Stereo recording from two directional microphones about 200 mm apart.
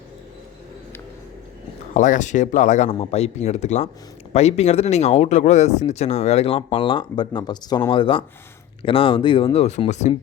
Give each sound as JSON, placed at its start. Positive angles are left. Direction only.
{"t": 1.9, "sound": "speech", "side_deg": 40}